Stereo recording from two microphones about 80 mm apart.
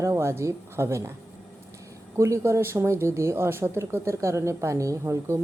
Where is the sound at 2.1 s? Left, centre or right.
Right.